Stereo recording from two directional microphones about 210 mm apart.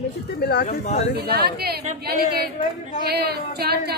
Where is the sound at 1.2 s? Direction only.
50° right (ahead or behind).